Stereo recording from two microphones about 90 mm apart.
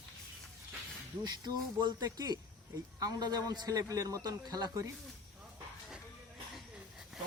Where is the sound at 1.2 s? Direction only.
50° right (ahead or behind).